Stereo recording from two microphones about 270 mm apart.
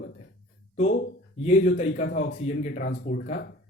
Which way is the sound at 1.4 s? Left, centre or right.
Left.